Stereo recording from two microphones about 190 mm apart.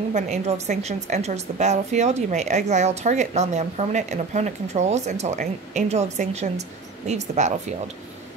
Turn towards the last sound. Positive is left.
turn(degrees=-35)  # may be behind; listen again after turning